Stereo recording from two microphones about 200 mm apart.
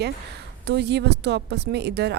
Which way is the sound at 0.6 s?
55° right (ahead or behind).